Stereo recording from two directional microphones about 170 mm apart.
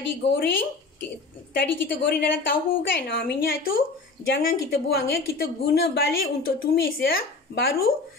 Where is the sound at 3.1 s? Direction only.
65° left (ahead or behind).